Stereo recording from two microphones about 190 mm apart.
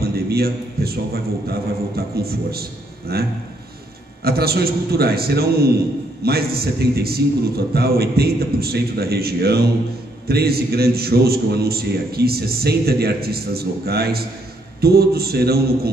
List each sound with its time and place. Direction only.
0.0 s a man's voice: 55° right (ahead or behind)